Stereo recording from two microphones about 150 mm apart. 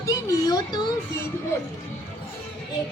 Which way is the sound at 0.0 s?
25° left (ahead or behind).